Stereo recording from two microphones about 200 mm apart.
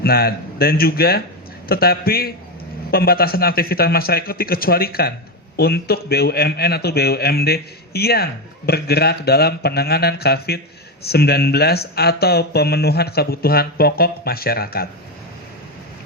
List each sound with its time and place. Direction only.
0.0 s a man's voice: 50° left (ahead or behind)